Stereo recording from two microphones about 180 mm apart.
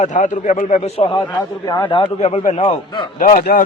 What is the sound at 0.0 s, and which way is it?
A man's voice, 40° left (ahead or behind).